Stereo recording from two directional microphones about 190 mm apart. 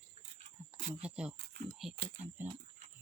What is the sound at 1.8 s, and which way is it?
Speech, centre (ahead or behind).